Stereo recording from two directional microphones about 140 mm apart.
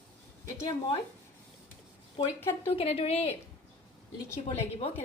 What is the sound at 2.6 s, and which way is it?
Speech, 45° left (ahead or behind).